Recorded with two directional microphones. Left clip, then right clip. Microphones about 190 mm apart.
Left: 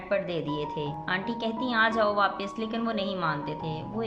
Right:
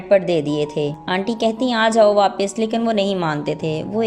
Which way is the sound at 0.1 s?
30° right (ahead or behind).